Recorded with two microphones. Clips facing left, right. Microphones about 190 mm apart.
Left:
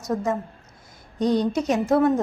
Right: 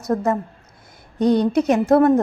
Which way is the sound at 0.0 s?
60° right (ahead or behind).